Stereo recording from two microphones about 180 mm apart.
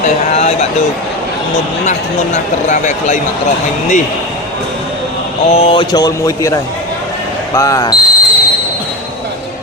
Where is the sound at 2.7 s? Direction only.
40° left (ahead or behind).